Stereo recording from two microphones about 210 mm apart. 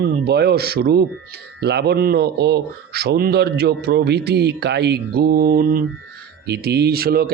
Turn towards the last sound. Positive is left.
turn(degrees=-45)  # may be behind; listen again after turning